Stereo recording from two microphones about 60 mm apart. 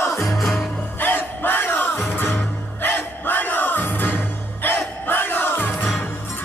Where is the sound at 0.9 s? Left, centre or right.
Left.